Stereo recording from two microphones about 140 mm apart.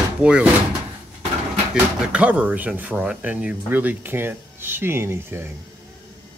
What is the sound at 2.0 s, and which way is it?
Speech, 10° right (ahead or behind).